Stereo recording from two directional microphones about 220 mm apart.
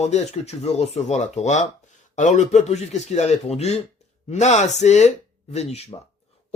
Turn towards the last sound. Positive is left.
turn(degrees=30)  # may be behind; listen again after turning